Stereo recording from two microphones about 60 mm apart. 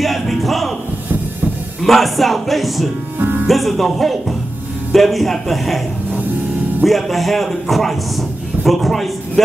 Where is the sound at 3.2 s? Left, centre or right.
Right.